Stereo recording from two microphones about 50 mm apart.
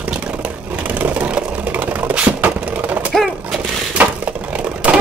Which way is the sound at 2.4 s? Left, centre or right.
Right.